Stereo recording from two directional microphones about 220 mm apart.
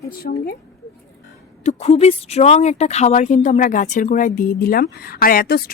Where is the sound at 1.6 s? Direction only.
30° left (ahead or behind).